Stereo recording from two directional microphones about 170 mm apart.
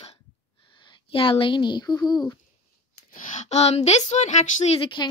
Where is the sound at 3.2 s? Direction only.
45° left (ahead or behind).